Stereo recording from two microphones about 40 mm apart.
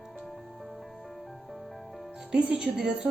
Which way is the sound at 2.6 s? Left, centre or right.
Right.